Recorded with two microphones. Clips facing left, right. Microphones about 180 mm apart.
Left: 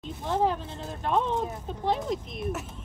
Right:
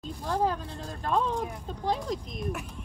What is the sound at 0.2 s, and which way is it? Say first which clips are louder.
Speech: left 2 dB; 20° left (ahead or behind).